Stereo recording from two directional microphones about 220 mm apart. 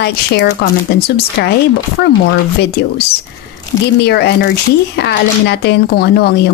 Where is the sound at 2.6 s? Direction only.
45° left (ahead or behind).